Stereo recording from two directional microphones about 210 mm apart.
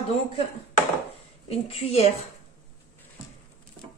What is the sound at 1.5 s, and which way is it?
Speech, 30° left (ahead or behind).